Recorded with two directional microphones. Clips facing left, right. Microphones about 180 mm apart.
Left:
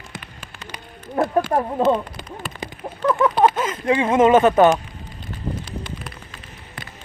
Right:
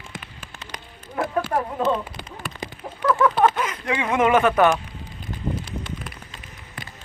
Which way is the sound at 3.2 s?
15° left (ahead or behind).